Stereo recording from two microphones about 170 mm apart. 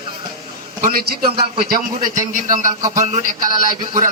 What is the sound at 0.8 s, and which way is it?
A man's voice, 60° right (ahead or behind).